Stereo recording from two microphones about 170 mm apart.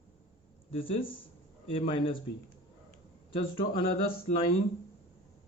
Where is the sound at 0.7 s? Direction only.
35° left (ahead or behind).